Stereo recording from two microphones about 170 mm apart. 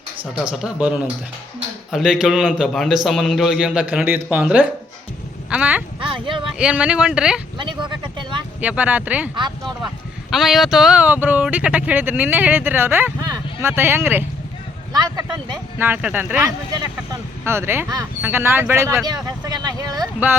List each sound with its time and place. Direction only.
0.5 s a man's voice: 5° right (ahead or behind)
5.5 s a sound: 10° right (ahead or behind)
6.0 s a sound: 30° right (ahead or behind)
6.6 s a man's voice: 5° right (ahead or behind)
7.6 s vehicle: 30° right (ahead or behind)
8.6 s speech: 10° right (ahead or behind)
10.3 s speech: centre (ahead or behind)
14.9 s speech: 25° right (ahead or behind)
15.8 s speech: 10° right (ahead or behind)